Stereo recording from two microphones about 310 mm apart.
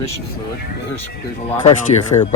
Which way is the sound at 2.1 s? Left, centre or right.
Centre.